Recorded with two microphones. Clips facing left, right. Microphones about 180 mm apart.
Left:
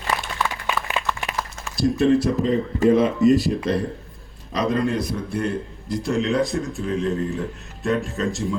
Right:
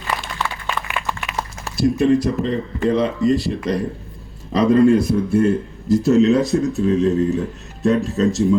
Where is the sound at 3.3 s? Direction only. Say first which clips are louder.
Left 1 dB; 20° left (ahead or behind).